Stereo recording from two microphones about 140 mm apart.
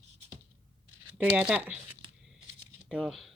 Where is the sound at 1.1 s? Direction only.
10° right (ahead or behind).